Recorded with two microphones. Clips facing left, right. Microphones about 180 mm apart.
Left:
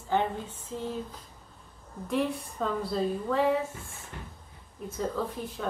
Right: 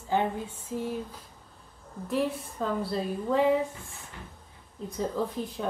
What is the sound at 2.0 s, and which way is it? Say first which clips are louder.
A woman's voice: even; centre (ahead or behind).